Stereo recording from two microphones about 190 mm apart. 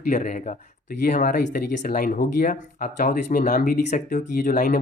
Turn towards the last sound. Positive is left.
turn(degrees=45)  # may be behind; listen again after turning